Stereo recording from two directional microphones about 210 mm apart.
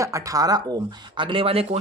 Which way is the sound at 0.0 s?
15° right (ahead or behind).